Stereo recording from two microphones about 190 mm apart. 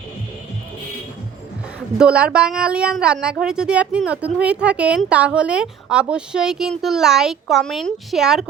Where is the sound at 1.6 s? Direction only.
5° right (ahead or behind).